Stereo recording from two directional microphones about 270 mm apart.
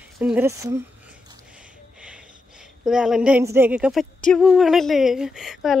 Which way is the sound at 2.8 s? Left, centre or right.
Centre.